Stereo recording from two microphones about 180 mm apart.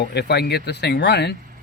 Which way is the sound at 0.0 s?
65° left (ahead or behind).